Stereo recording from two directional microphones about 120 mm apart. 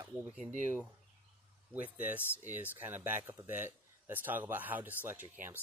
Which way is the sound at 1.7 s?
15° right (ahead or behind).